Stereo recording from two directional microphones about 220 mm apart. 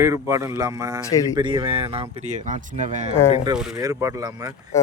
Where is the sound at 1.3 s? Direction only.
20° right (ahead or behind).